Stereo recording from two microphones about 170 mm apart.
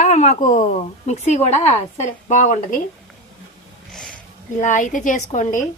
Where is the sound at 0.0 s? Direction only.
40° left (ahead or behind).